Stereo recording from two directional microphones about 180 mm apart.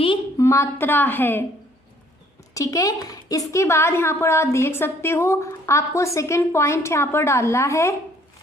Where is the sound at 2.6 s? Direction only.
20° left (ahead or behind).